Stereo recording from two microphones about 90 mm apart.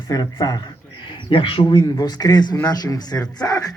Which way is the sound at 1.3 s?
75° left (ahead or behind).